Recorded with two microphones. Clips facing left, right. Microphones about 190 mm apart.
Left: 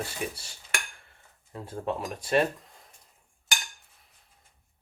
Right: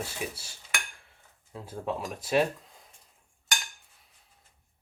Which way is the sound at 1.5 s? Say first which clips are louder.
Left 2 dB; centre (ahead or behind).